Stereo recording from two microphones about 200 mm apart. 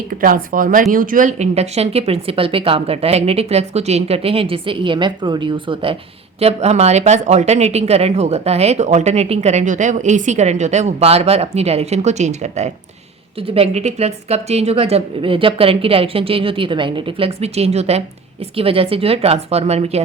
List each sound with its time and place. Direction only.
0.2 s speech: 45° right (ahead or behind)